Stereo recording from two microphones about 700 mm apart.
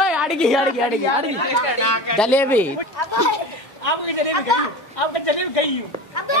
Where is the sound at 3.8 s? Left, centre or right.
Left.